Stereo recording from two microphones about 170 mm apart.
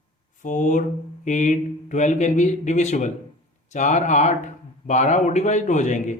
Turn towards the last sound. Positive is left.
turn(degrees=45)  # may be behind; listen again after turning